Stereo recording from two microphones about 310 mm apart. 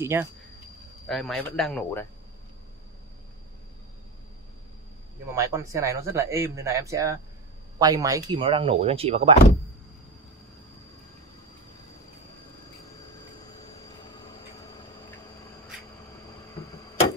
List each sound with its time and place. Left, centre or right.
0.0 s speech: centre
5.3 s speech: centre